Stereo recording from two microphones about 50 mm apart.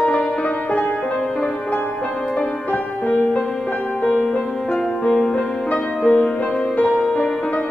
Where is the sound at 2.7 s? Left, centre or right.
Left.